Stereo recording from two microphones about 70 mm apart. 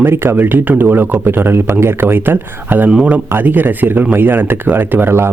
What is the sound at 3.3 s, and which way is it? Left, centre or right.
Speech, right.